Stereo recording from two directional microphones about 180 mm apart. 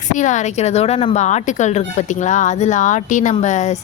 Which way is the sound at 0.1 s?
45° left (ahead or behind).